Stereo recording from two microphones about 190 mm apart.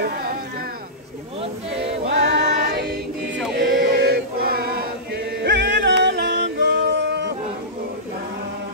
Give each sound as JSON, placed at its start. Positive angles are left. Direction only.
{"t": 0.0, "sound": "cat", "side_deg": -50}
{"t": 2.0, "sound": "music", "side_deg": -70}
{"t": 3.5, "sound": "chant", "side_deg": -60}
{"t": 5.4, "sound": "music", "side_deg": -65}